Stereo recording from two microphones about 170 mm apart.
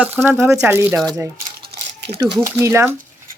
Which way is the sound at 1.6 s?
70° right (ahead or behind).